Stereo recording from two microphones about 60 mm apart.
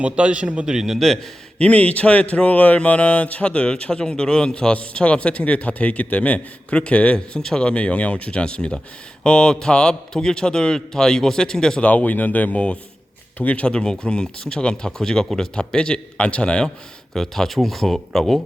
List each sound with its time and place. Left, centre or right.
0.0 s a man's voice: centre
1.5 s speech: left
11.9 s speech: left; by 18.4 s centre